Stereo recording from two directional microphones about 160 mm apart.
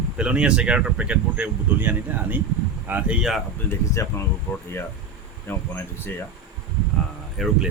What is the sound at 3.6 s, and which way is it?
Speech, 20° left (ahead or behind).